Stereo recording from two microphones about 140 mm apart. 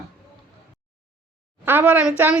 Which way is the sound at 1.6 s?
15° right (ahead or behind).